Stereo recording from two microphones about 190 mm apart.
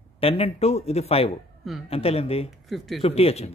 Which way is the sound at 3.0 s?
30° left (ahead or behind).